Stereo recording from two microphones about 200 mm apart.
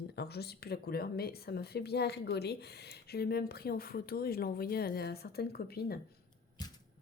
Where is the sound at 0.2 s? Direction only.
55° left (ahead or behind).